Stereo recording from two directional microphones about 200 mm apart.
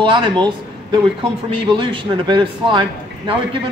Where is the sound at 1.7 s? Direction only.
25° right (ahead or behind).